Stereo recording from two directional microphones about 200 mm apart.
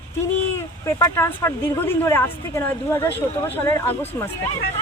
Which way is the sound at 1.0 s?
15° left (ahead or behind).